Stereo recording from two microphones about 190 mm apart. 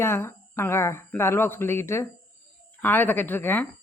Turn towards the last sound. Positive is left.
turn(degrees=10)  # may be behind; listen again after turning